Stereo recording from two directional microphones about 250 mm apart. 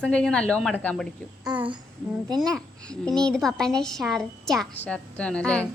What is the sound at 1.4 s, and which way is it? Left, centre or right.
Speech, centre.